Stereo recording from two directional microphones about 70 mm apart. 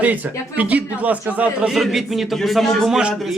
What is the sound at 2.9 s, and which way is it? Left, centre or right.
Speech, centre.